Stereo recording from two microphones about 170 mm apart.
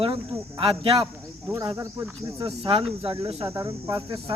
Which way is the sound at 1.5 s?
20° right (ahead or behind).